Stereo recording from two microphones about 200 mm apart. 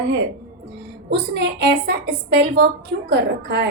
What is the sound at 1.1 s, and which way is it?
A woman's voice, 55° right (ahead or behind).